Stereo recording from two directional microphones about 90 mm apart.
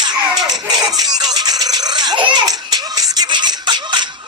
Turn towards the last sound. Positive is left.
turn(degrees=-55)  # may be behind; listen again after turning